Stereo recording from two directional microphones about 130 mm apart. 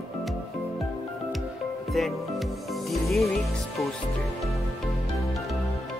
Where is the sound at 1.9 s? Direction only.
Centre (ahead or behind).